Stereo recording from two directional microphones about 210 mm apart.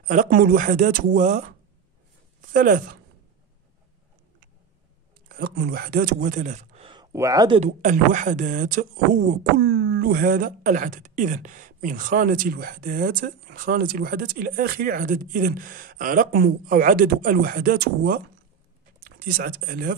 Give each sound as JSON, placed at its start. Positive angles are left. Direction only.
{"t": 0.0, "sound": "speech", "side_deg": -35}
{"t": 2.5, "sound": "speech", "side_deg": -40}
{"t": 5.3, "sound": "speech", "side_deg": -50}